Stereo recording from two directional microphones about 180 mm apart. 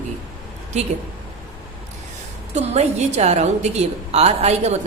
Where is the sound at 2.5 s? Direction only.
35° right (ahead or behind).